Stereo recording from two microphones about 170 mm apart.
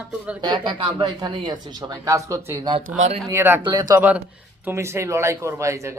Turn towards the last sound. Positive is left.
turn(degrees=-15)  # may be behind; listen again after turning